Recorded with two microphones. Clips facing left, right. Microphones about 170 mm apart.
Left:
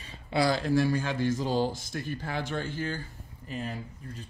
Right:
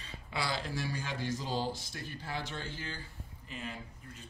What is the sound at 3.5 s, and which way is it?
Speech, 40° left (ahead or behind).